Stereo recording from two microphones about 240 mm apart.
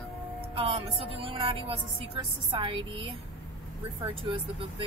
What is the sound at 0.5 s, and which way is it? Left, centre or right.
A woman's voice, right.